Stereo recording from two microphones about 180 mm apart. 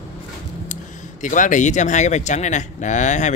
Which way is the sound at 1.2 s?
45° left (ahead or behind).